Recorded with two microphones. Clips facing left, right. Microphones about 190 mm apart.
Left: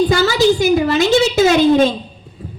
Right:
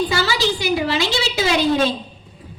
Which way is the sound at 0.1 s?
50° left (ahead or behind).